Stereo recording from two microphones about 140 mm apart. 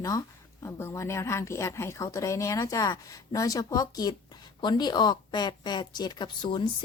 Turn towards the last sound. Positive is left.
turn(degrees=35)  # may be behind; listen again after turning